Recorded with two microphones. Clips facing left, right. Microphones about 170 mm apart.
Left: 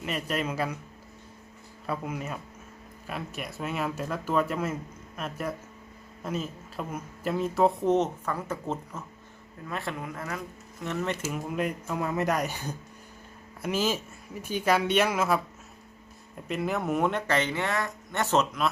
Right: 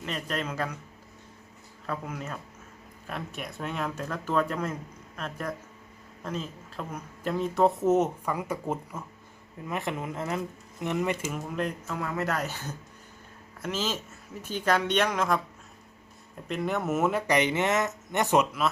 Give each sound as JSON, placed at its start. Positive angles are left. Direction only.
{"t": 0.0, "sound": "speech", "side_deg": 10}
{"t": 1.9, "sound": "speech", "side_deg": 10}
{"t": 11.2, "sound": "speech", "side_deg": 5}
{"t": 11.9, "sound": "speech", "side_deg": 20}
{"t": 16.5, "sound": "speech", "side_deg": 0}